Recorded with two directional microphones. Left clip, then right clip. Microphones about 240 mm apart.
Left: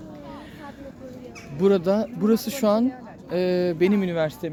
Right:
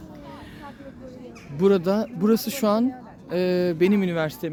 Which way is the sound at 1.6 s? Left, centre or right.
Centre.